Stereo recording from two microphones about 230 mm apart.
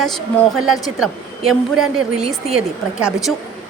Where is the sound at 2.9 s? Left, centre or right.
Centre.